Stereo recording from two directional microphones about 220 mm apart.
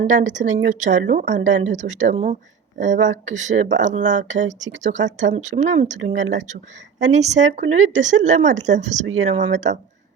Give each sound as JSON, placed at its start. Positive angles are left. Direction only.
{"t": 0.0, "sound": "a woman's voice", "side_deg": -35}